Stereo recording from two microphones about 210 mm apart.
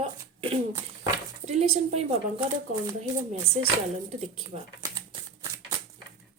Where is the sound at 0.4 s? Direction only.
25° right (ahead or behind).